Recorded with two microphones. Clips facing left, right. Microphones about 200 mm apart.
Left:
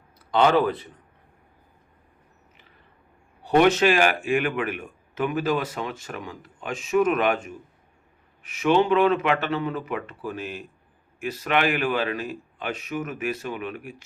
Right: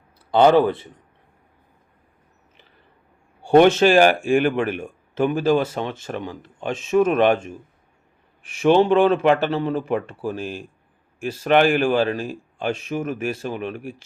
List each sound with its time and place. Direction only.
0.3 s speech: 30° right (ahead or behind)
3.4 s speech: 30° right (ahead or behind)